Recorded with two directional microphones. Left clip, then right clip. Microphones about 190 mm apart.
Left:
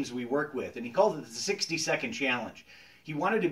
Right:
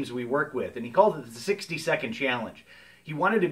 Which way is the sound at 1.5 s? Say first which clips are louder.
Right 3 dB; 20° right (ahead or behind).